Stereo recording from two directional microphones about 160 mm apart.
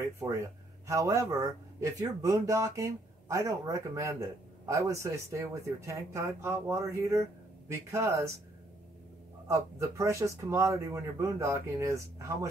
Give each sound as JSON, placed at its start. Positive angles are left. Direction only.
{"t": 0.2, "sound": "a man's voice", "side_deg": -20}
{"t": 9.5, "sound": "speech", "side_deg": -20}